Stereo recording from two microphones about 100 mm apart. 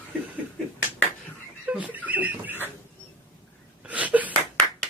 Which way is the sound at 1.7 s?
15° right (ahead or behind).